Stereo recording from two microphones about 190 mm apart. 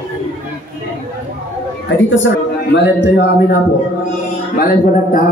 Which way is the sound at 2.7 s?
60° left (ahead or behind).